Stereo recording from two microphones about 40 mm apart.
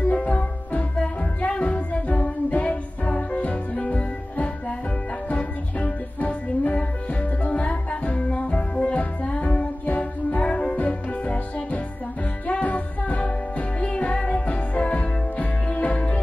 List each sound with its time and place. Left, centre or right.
0.0 s music: left